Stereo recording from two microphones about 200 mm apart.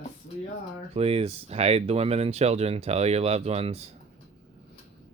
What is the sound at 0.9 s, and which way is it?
Speech, 30° right (ahead or behind).